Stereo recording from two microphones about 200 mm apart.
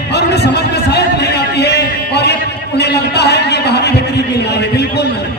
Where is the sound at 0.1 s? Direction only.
55° left (ahead or behind).